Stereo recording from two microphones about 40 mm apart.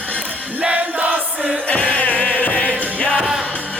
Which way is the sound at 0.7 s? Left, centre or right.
Right.